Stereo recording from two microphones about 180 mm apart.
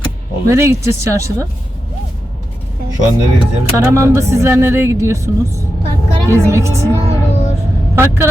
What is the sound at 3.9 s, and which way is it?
Speech, 15° right (ahead or behind).